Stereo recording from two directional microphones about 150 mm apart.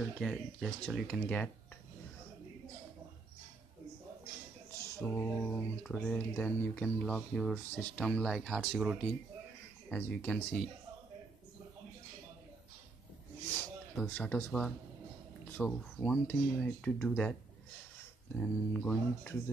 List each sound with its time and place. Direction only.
0.2 s speech: centre (ahead or behind)
5.0 s speech: 15° left (ahead or behind); by 9.0 s 5° right (ahead or behind)
9.8 s speech: 10° left (ahead or behind)
13.5 s a sound: 10° left (ahead or behind)
15.5 s speech: 10° left (ahead or behind)
18.4 s speech: 10° left (ahead or behind)